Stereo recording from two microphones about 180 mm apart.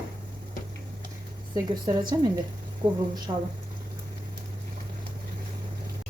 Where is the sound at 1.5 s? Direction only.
25° right (ahead or behind).